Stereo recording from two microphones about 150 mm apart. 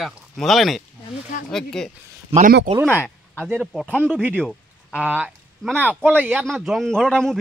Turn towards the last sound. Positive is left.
turn(degrees=5)  # may be behind; listen again after turning